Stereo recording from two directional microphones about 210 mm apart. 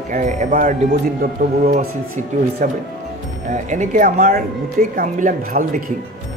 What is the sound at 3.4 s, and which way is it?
Speech, 35° right (ahead or behind).